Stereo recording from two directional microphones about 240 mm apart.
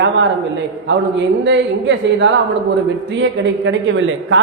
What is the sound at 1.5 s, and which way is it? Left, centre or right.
A man's voice, right.